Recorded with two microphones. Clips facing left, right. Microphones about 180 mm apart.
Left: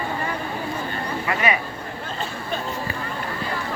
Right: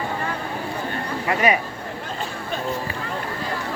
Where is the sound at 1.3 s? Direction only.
45° right (ahead or behind).